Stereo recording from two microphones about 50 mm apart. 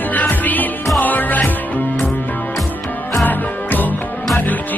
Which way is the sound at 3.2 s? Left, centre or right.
Left.